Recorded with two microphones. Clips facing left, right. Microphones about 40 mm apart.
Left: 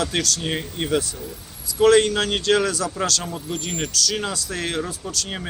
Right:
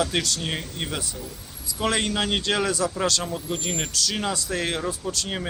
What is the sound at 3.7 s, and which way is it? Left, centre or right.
Speech, centre.